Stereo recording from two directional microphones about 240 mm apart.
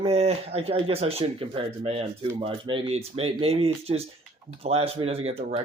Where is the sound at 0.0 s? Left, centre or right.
Right.